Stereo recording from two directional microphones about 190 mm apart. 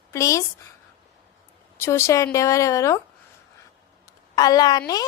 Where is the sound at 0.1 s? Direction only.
15° left (ahead or behind).